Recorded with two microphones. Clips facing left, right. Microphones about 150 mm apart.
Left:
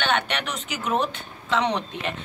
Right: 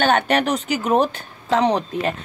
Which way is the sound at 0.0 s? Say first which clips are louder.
Right 8 dB; 40° right (ahead or behind).